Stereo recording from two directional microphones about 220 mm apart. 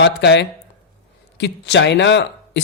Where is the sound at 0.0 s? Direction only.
50° left (ahead or behind).